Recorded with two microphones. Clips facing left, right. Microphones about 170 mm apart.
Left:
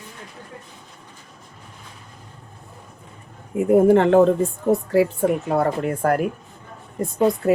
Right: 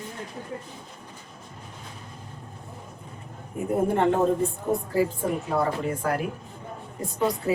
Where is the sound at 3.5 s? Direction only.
90° left.